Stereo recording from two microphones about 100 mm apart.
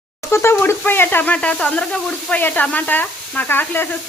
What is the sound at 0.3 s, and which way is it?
Speech, 25° left (ahead or behind).